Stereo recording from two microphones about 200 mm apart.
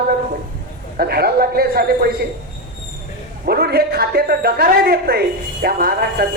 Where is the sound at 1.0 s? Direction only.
50° right (ahead or behind).